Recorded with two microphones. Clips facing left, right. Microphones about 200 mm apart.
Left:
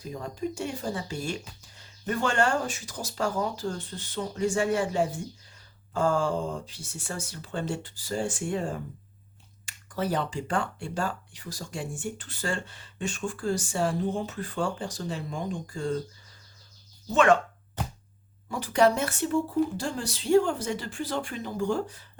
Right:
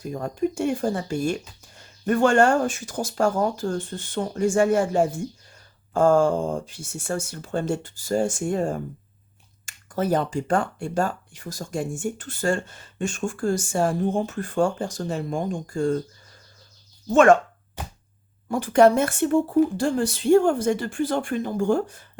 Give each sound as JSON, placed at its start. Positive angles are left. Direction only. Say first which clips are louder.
{"t": 0.0, "sound": "speech", "louder": "right 7 dB", "side_deg": -50}
{"t": 17.1, "sound": "speech", "louder": "right 6 dB", "side_deg": -45}
{"t": 18.4, "sound": "speech", "louder": "right 6 dB", "side_deg": -50}